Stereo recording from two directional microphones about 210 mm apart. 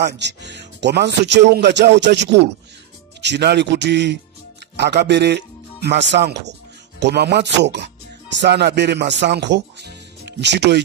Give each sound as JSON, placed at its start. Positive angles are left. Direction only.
{"t": 0.0, "sound": "speech", "side_deg": -55}